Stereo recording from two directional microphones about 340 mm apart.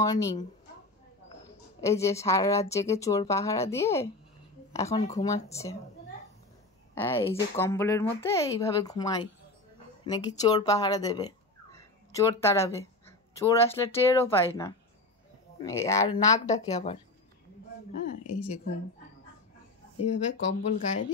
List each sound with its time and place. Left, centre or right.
0.0 s a woman's voice: centre
1.8 s a woman's voice: centre
7.0 s a woman's voice: centre
20.3 s speech: left